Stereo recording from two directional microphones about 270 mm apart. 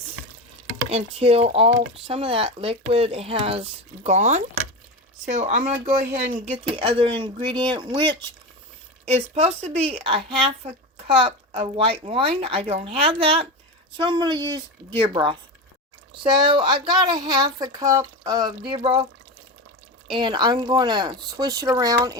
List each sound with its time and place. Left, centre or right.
0.9 s speech: right
20.1 s speech: centre